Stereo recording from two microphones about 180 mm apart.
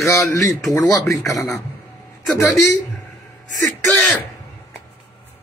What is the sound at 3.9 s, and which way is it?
Speech, 5° left (ahead or behind).